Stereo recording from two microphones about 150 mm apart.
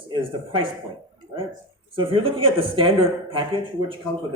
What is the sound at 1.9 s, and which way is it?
Speech, 35° right (ahead or behind).